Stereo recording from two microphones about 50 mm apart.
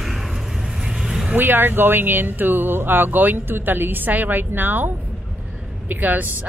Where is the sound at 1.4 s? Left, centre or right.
Right.